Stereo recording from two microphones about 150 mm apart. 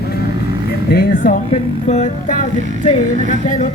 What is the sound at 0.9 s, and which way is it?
Speech, 80° left.